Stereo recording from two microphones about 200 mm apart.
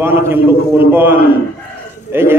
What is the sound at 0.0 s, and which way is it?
A man's voice, 10° right (ahead or behind).